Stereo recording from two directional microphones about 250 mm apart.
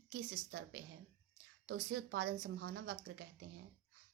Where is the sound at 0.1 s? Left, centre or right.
Right.